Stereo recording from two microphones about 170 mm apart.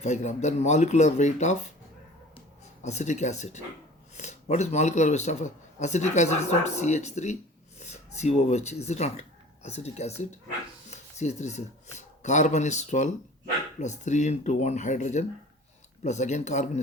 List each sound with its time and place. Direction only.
0.0 s speech: 40° left (ahead or behind)
2.8 s speech: 40° left (ahead or behind)